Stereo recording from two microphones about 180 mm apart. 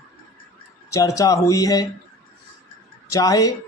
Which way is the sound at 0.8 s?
15° left (ahead or behind).